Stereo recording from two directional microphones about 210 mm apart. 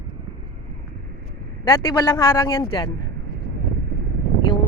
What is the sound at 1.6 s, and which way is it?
Speech, 20° left (ahead or behind).